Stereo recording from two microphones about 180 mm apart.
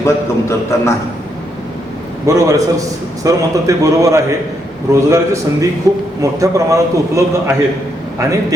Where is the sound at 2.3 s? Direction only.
20° right (ahead or behind).